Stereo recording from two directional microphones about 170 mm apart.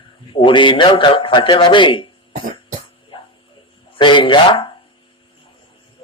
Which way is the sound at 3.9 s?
30° left (ahead or behind).